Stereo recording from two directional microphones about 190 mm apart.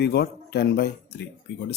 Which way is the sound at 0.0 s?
60° left (ahead or behind).